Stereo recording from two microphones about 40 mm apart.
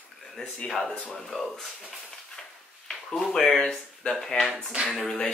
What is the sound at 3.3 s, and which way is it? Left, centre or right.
Speech, centre.